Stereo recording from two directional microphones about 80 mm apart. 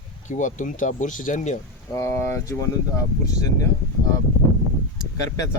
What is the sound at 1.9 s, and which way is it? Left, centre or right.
Speech, left.